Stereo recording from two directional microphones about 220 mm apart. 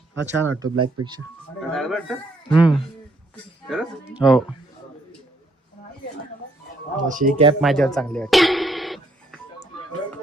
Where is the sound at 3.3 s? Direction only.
Centre (ahead or behind).